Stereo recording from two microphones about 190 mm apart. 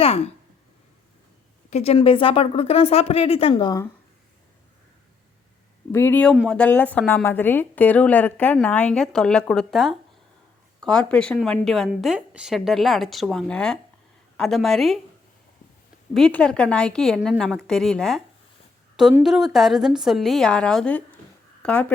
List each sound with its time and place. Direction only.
1.7 s speech: 35° left (ahead or behind)
5.9 s a woman's voice: 10° left (ahead or behind)
16.1 s a woman's voice: 5° left (ahead or behind)
19.2 s a woman's voice: centre (ahead or behind)